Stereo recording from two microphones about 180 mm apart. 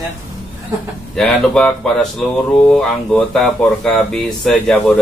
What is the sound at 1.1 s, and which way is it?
Speech, 5° left (ahead or behind).